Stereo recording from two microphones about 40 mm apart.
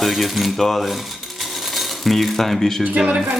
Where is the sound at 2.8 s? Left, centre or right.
Right.